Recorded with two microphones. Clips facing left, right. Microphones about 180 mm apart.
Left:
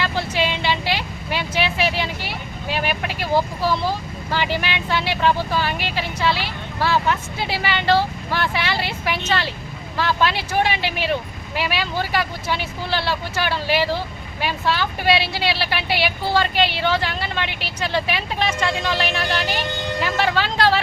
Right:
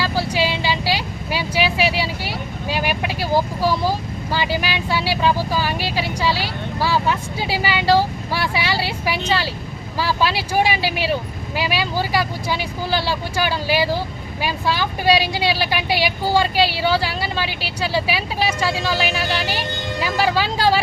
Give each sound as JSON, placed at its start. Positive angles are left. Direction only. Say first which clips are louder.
{"t": 0.0, "sound": "vehicle", "louder": "right 2 dB", "side_deg": -10}
{"t": 6.0, "sound": "speech", "louder": "even", "side_deg": -10}